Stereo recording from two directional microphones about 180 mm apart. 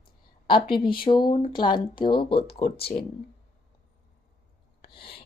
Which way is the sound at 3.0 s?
40° left (ahead or behind).